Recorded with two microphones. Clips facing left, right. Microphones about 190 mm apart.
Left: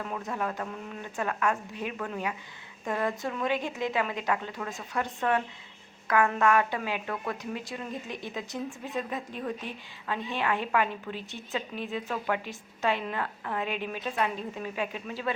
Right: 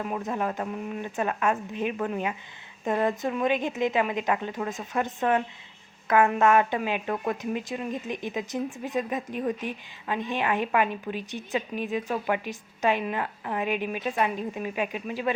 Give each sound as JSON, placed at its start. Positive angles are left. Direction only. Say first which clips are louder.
{"t": 0.0, "sound": "a woman's voice", "louder": "right 4 dB", "side_deg": -20}